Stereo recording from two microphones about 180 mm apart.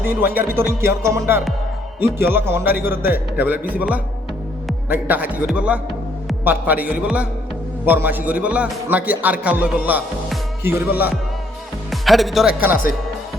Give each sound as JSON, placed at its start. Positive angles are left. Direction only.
{"t": 0.0, "sound": "a man's voice", "side_deg": -10}
{"t": 11.9, "sound": "speech", "side_deg": 0}